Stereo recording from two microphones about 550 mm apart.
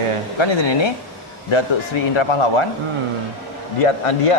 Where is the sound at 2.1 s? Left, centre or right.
Left.